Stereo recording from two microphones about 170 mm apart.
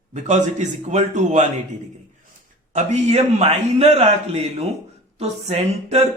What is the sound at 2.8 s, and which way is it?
Speech, 40° right (ahead or behind).